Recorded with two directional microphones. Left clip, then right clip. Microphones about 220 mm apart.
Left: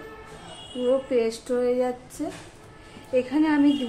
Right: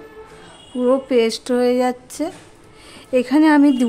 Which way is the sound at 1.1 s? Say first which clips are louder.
Right 7 dB; 55° right (ahead or behind).